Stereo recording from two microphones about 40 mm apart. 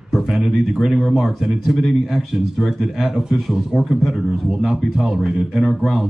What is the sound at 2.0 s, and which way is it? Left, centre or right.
Speech, centre.